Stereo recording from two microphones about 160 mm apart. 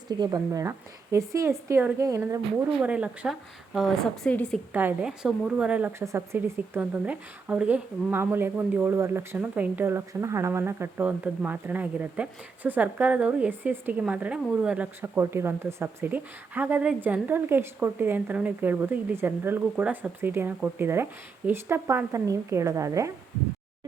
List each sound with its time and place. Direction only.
0.1 s a woman's voice: 25° right (ahead or behind)
2.8 s a woman's voice: 10° right (ahead or behind)
3.8 s a woman's voice: 5° left (ahead or behind)
4.7 s a woman's voice: 10° right (ahead or behind)